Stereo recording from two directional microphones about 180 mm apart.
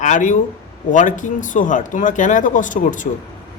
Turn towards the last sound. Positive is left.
turn(degrees=45)  # may be behind; listen again after turning